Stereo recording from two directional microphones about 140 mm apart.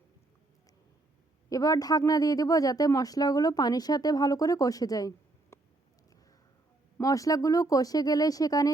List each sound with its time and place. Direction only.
1.5 s speech: 25° left (ahead or behind)
7.0 s speech: 25° left (ahead or behind)